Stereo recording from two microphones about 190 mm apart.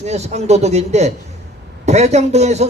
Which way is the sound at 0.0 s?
35° right (ahead or behind).